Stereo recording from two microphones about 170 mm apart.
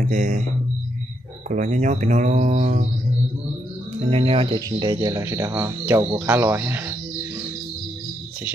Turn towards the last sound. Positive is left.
turn(degrees=-10)  # may be behind; listen again after turning